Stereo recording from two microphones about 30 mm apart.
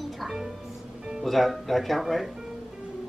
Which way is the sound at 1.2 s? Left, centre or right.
Centre.